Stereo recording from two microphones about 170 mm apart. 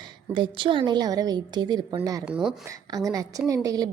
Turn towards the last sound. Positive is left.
turn(degrees=-20)  # may be behind; listen again after turning